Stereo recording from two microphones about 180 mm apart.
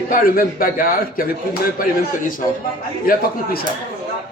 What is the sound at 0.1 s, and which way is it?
A man's voice, 55° left (ahead or behind).